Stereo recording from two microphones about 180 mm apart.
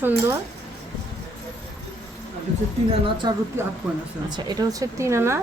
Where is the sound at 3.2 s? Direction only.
25° right (ahead or behind).